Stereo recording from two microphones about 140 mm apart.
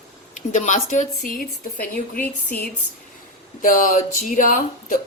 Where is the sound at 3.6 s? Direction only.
70° left (ahead or behind).